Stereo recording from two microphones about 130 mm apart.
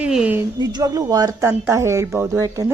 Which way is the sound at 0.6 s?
30° right (ahead or behind).